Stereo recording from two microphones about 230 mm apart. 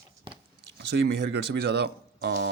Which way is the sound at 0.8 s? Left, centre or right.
Right.